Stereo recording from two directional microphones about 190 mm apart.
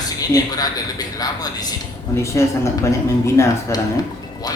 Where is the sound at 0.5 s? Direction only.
20° left (ahead or behind).